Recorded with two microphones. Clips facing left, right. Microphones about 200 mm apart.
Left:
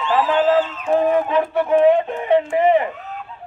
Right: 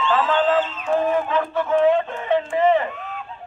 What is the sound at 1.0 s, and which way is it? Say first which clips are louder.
A man's voice: left 4 dB; 15° left (ahead or behind).